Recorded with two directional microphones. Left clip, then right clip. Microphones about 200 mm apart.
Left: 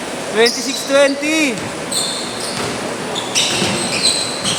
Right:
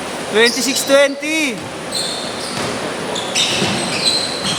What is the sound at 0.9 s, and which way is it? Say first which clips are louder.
Speech: left 1 dB; 40° right (ahead or behind).